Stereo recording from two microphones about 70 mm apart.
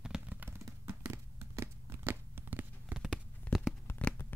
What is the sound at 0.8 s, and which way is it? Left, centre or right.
Tearing, right.